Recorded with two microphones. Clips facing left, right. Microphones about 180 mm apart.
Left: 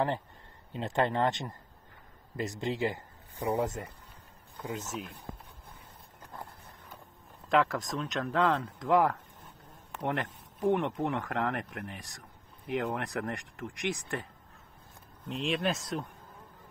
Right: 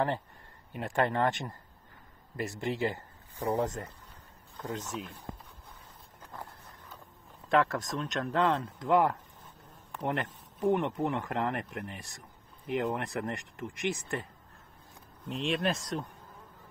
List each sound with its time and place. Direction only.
0.7 s speech: 20° left (ahead or behind); by 5.1 s centre (ahead or behind)
7.4 s speech: centre (ahead or behind)
15.2 s speech: centre (ahead or behind)